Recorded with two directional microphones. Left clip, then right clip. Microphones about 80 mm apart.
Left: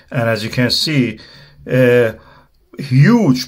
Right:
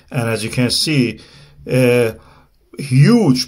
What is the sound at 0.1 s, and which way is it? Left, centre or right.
Speech, right.